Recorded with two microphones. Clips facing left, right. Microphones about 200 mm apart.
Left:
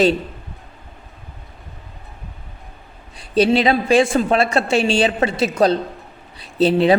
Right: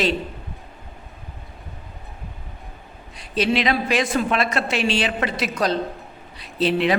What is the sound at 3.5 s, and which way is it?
A woman's voice, 30° left (ahead or behind).